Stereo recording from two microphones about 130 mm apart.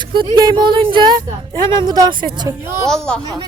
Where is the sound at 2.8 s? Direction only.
5° left (ahead or behind).